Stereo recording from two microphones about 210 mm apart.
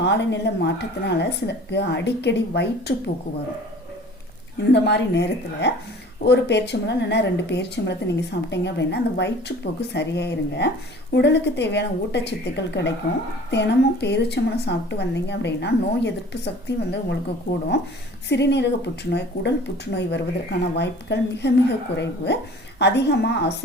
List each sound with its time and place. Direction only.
0.0 s speech: 55° left (ahead or behind)
4.7 s a woman's voice: 55° left (ahead or behind)
18.3 s a woman's voice: 55° left (ahead or behind)